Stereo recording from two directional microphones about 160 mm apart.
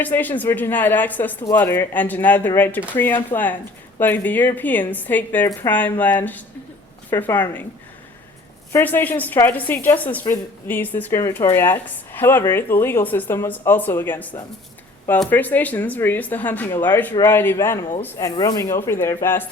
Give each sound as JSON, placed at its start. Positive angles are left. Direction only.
{"t": 0.0, "sound": "a woman's voice", "side_deg": 10}
{"t": 8.7, "sound": "a woman's voice", "side_deg": 10}